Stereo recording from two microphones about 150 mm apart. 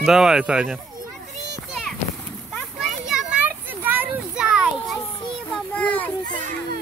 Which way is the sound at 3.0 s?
5° right (ahead or behind).